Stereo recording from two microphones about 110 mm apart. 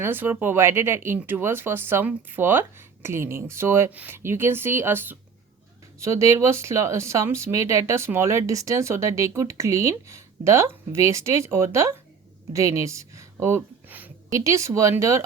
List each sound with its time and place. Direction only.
0.0 s speech: 20° right (ahead or behind)
13.4 s gasp: 20° right (ahead or behind)
14.3 s speech: 30° right (ahead or behind)